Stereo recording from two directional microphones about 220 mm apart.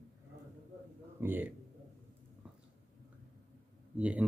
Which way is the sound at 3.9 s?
5° right (ahead or behind).